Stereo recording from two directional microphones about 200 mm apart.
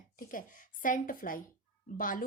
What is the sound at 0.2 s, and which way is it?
A woman's voice, 45° left (ahead or behind).